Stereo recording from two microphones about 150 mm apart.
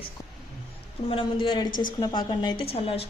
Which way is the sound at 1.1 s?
35° left (ahead or behind).